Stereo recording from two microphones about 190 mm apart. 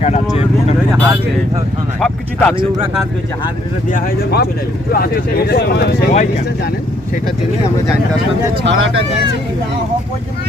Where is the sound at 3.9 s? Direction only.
60° left (ahead or behind).